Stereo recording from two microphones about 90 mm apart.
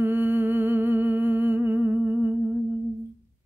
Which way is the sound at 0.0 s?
20° right (ahead or behind).